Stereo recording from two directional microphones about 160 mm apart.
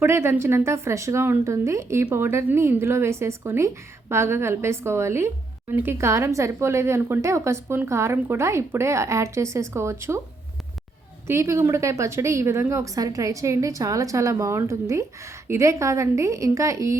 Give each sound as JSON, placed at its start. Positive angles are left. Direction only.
{"t": 0.0, "sound": "a woman's voice", "side_deg": -15}
{"t": 11.3, "sound": "a woman's voice", "side_deg": -15}